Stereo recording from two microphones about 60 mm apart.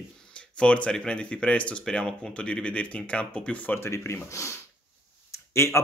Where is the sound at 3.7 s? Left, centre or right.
Left.